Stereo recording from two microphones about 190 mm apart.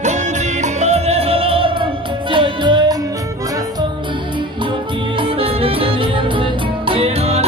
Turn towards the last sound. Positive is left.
turn(degrees=-35)  # may be behind; listen again after turning